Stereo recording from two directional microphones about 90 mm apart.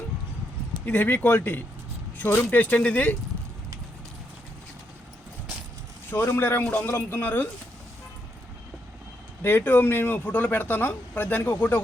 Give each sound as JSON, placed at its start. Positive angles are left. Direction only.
{"t": 0.9, "sound": "speech", "side_deg": 20}
{"t": 6.1, "sound": "speech", "side_deg": 25}
{"t": 9.4, "sound": "speech", "side_deg": 25}